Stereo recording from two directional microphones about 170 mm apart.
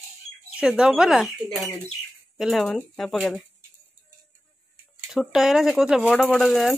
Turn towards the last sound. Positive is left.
turn(degrees=0)  # may be behind; listen again after turning